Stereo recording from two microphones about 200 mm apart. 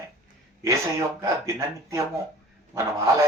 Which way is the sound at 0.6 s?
15° right (ahead or behind).